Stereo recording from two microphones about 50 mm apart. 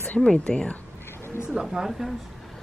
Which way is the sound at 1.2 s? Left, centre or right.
Left.